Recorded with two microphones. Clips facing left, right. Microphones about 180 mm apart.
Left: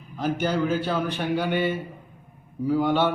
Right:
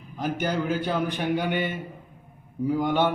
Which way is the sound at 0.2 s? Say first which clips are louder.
Left 3 dB; 15° right (ahead or behind).